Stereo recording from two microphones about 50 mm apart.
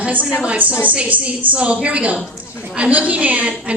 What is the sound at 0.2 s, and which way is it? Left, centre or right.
Speech, left.